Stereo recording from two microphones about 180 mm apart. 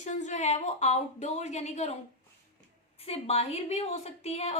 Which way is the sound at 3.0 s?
35° left (ahead or behind).